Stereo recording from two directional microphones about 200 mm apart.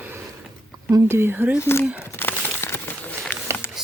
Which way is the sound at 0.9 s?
10° right (ahead or behind).